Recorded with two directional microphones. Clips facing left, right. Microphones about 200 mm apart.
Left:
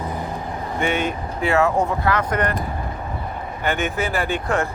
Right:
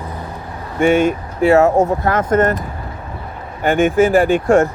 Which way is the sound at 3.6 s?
45° right (ahead or behind).